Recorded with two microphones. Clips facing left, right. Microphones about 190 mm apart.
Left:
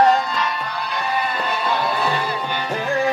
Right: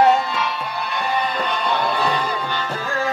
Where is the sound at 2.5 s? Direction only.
15° left (ahead or behind).